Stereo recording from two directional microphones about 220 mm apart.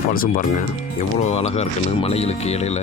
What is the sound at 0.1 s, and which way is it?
Speech, 40° left (ahead or behind).